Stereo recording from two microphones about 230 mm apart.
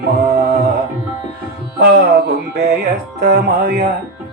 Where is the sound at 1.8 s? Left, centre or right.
Right.